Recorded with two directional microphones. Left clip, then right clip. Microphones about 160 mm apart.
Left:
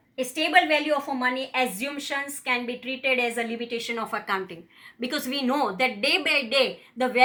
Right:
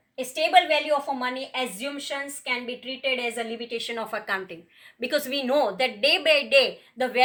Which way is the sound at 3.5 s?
30° right (ahead or behind).